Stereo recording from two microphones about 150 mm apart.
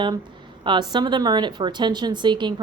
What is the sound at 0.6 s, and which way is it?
A woman's voice, 30° right (ahead or behind).